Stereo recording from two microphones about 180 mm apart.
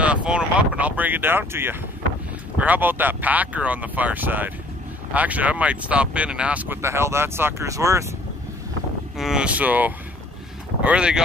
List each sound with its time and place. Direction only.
0.0 s speech: 5° right (ahead or behind)
9.1 s speech: centre (ahead or behind)